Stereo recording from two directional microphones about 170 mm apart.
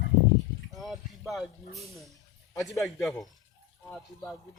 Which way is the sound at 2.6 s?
20° left (ahead or behind).